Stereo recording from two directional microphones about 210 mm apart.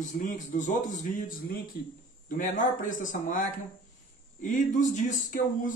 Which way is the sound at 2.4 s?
40° left (ahead or behind).